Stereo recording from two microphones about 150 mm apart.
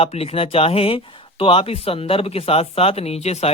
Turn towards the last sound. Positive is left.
turn(degrees=45)  # may be behind; listen again after turning